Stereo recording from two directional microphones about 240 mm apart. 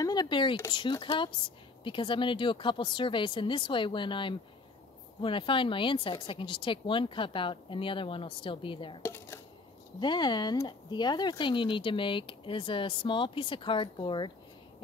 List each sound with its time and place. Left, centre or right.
0.0 s speech: centre
9.0 s a sound: centre
9.9 s speech: centre